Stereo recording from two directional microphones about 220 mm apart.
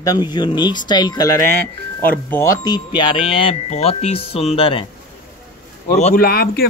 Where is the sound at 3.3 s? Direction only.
25° left (ahead or behind).